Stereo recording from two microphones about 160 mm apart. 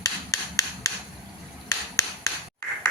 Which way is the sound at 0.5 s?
20° left (ahead or behind).